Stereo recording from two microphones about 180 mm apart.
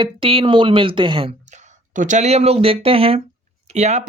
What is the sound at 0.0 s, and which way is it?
Speech, 30° right (ahead or behind).